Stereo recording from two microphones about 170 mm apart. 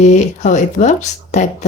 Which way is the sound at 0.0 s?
45° left (ahead or behind).